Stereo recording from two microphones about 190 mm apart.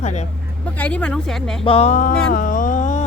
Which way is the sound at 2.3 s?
45° left (ahead or behind).